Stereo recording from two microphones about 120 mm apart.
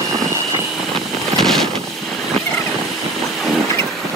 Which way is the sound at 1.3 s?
5° left (ahead or behind).